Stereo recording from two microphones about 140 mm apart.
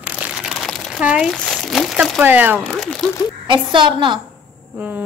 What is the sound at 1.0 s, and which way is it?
Speech, 5° right (ahead or behind).